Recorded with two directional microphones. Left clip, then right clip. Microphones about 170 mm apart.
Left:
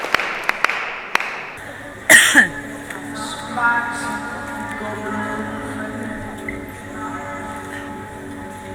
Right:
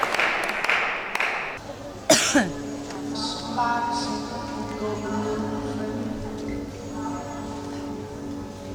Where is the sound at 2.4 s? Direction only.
45° right (ahead or behind).